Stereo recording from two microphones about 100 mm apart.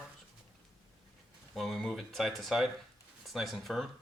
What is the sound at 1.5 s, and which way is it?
Speech, centre (ahead or behind).